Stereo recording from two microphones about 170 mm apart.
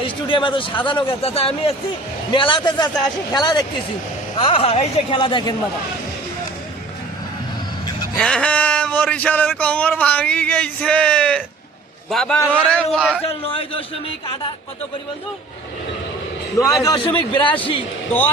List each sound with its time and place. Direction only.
0.0 s a man's voice: 30° left (ahead or behind)
8.2 s a man's voice: 5° left (ahead or behind)
13.2 s a man's voice: 35° left (ahead or behind)
16.8 s a man's voice: 25° left (ahead or behind)